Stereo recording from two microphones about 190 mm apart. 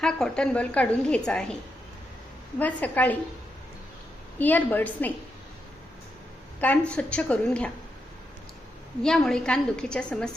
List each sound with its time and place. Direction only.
0.0 s a woman's voice: 5° left (ahead or behind)
2.6 s a woman's voice: 10° left (ahead or behind)
4.4 s a woman's voice: 10° left (ahead or behind)
6.6 s a woman's voice: 5° left (ahead or behind)
9.0 s a woman's voice: 5° left (ahead or behind)